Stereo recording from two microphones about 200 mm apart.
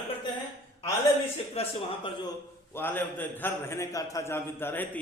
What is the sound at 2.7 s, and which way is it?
A man's voice, 10° left (ahead or behind).